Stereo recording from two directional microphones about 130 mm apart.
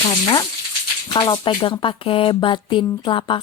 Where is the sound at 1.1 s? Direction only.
30° left (ahead or behind).